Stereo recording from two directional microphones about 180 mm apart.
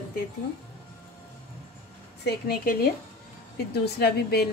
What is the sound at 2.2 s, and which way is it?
Speech, 55° left (ahead or behind).